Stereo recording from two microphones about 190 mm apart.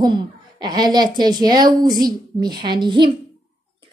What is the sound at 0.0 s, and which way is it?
Speech, 20° right (ahead or behind).